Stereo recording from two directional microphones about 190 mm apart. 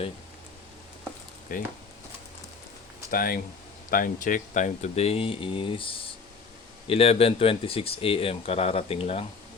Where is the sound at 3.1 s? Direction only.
50° left (ahead or behind); by 9.3 s 30° left (ahead or behind).